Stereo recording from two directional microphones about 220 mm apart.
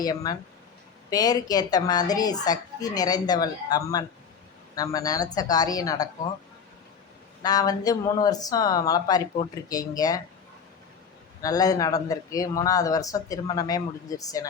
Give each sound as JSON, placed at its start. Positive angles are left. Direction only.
{"t": 0.0, "sound": "speech", "side_deg": 15}
{"t": 7.4, "sound": "speech", "side_deg": 15}
{"t": 11.4, "sound": "speech", "side_deg": 15}